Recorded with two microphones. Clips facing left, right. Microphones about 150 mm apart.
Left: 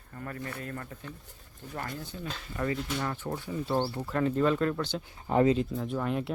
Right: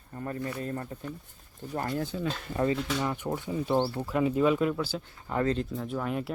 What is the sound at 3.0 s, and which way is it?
Speech, 15° right (ahead or behind).